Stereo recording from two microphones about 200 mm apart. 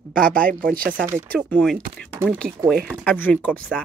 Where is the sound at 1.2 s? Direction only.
5° left (ahead or behind).